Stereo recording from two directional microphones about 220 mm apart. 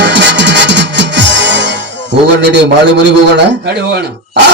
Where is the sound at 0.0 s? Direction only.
55° right (ahead or behind).